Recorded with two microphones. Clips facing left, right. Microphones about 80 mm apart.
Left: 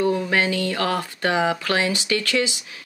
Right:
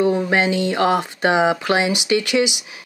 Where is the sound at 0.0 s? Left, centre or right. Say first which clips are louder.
Right 3 dB; right.